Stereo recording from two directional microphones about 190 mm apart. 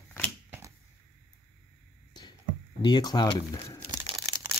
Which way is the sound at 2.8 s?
20° left (ahead or behind).